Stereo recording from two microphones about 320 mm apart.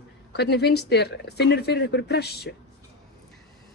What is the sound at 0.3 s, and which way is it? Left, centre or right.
Speech, left.